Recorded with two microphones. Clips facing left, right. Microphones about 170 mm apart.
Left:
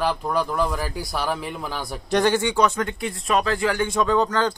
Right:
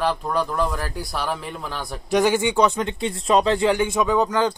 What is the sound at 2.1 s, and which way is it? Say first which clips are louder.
Speech: right 1 dB; 5° right (ahead or behind).